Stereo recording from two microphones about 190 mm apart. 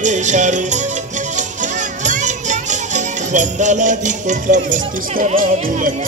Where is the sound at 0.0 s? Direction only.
40° right (ahead or behind).